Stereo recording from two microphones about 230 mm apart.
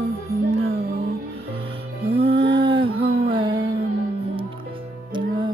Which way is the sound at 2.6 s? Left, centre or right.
Right.